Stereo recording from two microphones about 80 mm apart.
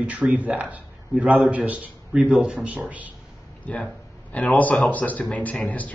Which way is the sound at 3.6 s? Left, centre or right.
Centre.